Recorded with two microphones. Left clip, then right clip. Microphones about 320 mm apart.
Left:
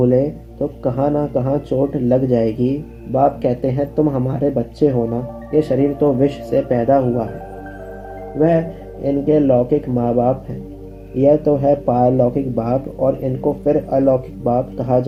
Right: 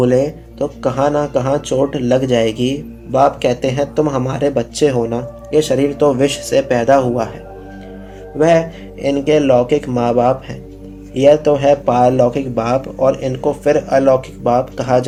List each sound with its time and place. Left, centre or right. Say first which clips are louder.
0.0 s speech: right 2 dB; right
8.4 s speech: right 4 dB; right